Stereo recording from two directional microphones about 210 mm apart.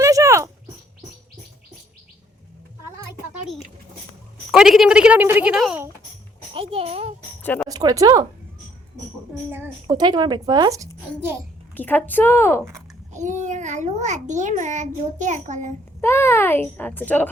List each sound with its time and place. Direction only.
0.0 s a sound: 15° right (ahead or behind)
4.5 s a woman's voice: centre (ahead or behind)
6.5 s a sound: 25° right (ahead or behind)
7.4 s speech: 10° left (ahead or behind)
7.7 s speech: 15° right (ahead or behind)
9.5 s a child's voice: 10° right (ahead or behind)
11.8 s a child's voice: 10° left (ahead or behind)
13.1 s a child's voice: 35° right (ahead or behind)
16.0 s a child's voice: 10° left (ahead or behind)